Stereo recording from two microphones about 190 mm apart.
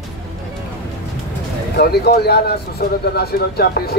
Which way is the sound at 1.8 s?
55° left (ahead or behind).